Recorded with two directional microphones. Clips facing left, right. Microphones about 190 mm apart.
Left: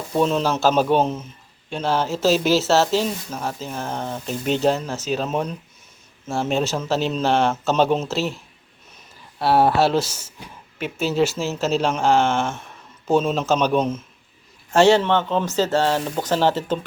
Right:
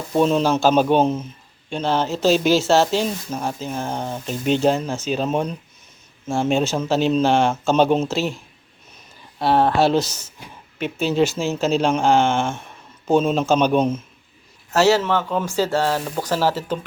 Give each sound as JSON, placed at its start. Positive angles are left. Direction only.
{"t": 0.1, "sound": "speech", "side_deg": -5}
{"t": 9.4, "sound": "speech", "side_deg": 10}